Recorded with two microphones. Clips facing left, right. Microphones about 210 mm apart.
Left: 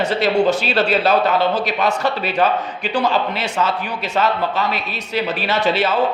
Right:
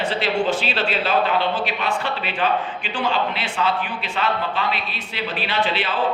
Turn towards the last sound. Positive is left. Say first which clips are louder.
# left 6 dB
turn(degrees=40)  # may be behind; listen again after turning